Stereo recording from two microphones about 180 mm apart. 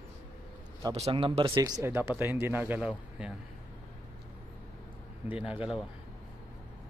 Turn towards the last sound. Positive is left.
turn(degrees=-5)  # may be behind; listen again after turning